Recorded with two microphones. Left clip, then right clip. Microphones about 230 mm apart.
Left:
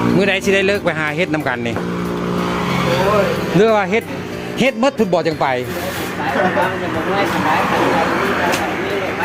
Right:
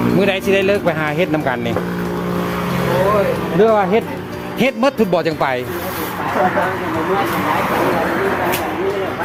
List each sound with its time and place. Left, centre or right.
0.2 s speech: centre
3.6 s speech: left
4.6 s speech: centre